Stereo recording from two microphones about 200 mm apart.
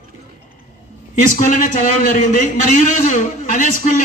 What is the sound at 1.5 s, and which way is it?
A man's voice, 40° left (ahead or behind).